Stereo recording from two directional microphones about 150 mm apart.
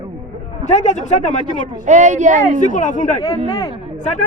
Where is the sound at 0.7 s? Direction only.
50° left (ahead or behind).